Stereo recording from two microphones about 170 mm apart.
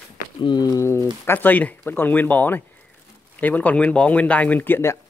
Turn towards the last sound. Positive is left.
turn(degrees=15)  # may be behind; listen again after turning